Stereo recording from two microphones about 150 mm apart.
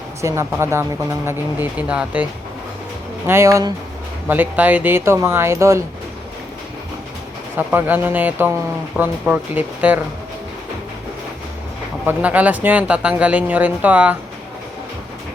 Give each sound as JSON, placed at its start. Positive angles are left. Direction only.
{"t": 0.2, "sound": "speech", "side_deg": -20}
{"t": 3.2, "sound": "speech", "side_deg": -20}
{"t": 7.5, "sound": "speech", "side_deg": -15}
{"t": 12.0, "sound": "speech", "side_deg": -10}